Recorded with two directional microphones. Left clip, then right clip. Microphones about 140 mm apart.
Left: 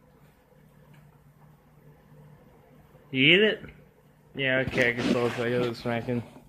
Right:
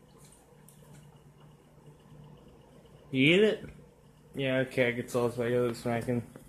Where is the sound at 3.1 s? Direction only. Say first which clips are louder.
Left 4 dB; centre (ahead or behind).